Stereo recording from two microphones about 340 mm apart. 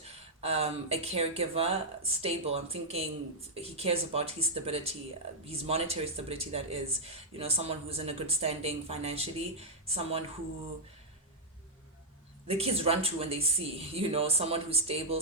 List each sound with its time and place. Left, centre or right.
0.0 s speech: centre
12.5 s speech: centre